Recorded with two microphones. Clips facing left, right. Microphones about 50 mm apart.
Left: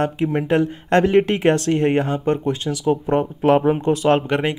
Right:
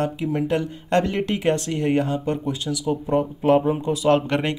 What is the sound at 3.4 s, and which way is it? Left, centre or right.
Speech, left.